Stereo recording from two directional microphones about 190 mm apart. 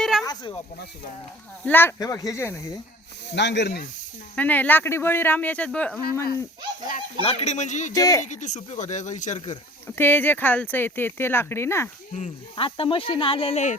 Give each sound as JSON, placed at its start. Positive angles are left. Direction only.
{"t": 0.0, "sound": "a sound", "side_deg": 0}
{"t": 0.3, "sound": "speech", "side_deg": 20}
{"t": 1.6, "sound": "speech", "side_deg": 10}
{"t": 3.3, "sound": "speech", "side_deg": 65}
{"t": 4.4, "sound": "speech", "side_deg": 10}
{"t": 7.2, "sound": "speech", "side_deg": 30}
{"t": 7.9, "sound": "speech", "side_deg": 20}
{"t": 8.2, "sound": "speech", "side_deg": 40}
{"t": 9.8, "sound": "speech", "side_deg": 10}
{"t": 12.1, "sound": "speech", "side_deg": 35}